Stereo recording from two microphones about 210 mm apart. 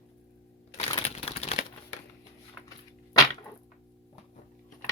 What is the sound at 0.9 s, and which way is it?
Crumpling, 30° left (ahead or behind).